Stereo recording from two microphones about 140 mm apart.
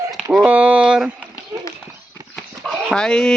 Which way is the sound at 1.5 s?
25° right (ahead or behind).